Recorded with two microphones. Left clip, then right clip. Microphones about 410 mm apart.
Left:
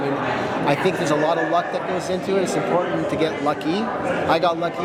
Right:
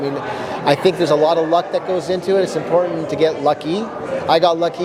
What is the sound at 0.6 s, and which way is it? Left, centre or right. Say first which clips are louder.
A man's voice: right 8 dB; right.